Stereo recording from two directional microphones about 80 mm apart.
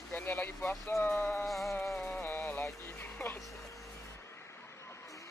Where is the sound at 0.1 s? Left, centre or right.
Left.